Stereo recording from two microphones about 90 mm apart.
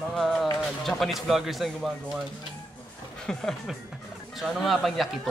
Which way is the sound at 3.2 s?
5° left (ahead or behind).